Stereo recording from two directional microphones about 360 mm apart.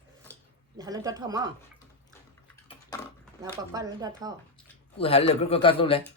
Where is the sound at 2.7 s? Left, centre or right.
Centre.